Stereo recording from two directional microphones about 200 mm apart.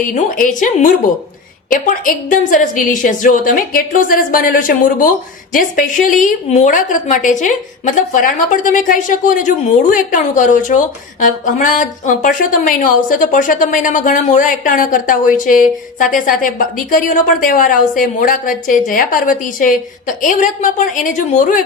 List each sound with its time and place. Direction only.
0.1 s a woman's voice: 40° left (ahead or behind)